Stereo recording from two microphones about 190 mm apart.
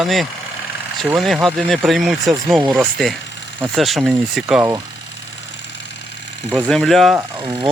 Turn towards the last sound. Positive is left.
turn(degrees=-20)  # may be behind; listen again after turning